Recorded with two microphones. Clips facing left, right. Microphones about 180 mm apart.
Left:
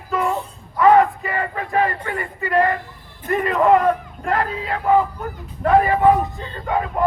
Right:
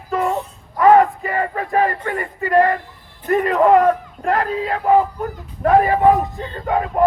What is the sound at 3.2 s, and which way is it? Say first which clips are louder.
Speech: right 2 dB; 45° right (ahead or behind).